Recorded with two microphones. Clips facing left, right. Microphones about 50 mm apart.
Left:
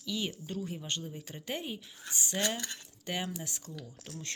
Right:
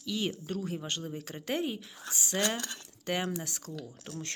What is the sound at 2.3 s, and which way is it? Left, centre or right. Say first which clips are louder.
Speech: right 3 dB; right.